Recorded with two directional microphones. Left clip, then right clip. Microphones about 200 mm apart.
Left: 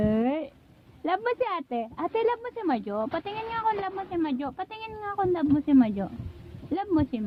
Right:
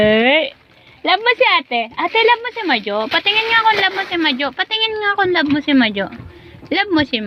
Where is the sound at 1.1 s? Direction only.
5° left (ahead or behind).